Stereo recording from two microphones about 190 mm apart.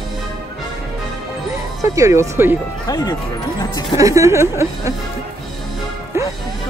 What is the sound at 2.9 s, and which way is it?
Speech, 20° left (ahead or behind).